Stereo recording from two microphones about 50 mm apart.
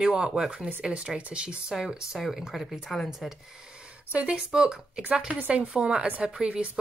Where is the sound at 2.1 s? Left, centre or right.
Centre.